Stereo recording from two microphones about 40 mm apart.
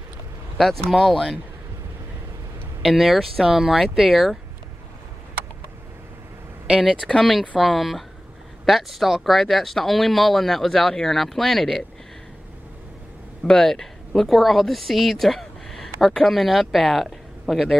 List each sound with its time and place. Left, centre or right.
0.6 s speech: centre
2.8 s speech: centre
3.5 s speech: centre
7.0 s speech: left
7.5 s speech: centre
13.4 s speech: centre